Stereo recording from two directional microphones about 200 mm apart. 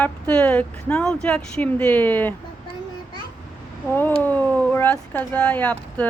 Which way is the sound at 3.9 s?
10° left (ahead or behind).